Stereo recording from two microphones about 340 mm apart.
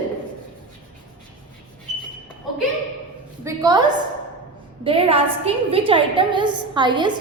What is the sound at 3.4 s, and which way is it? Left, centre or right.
A woman's voice, centre.